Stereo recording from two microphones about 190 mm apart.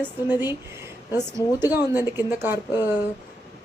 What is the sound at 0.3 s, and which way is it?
A woman's voice, 10° right (ahead or behind).